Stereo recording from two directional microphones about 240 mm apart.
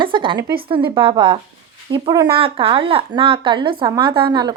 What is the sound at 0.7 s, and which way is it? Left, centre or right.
A woman's voice, right.